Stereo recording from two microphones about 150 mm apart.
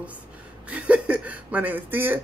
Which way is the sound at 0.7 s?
10° right (ahead or behind).